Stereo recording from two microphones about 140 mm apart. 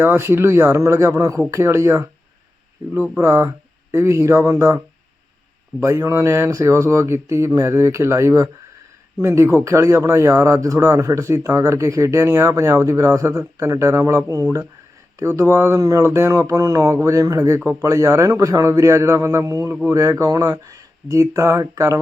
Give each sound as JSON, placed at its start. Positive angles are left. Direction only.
{"t": 0.0, "sound": "speech", "side_deg": -15}
{"t": 5.8, "sound": "speech", "side_deg": -20}